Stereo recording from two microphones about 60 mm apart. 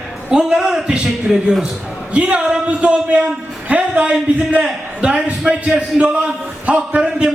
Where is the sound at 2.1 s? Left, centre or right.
Centre.